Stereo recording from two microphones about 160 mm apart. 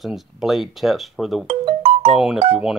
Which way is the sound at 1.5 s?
35° right (ahead or behind).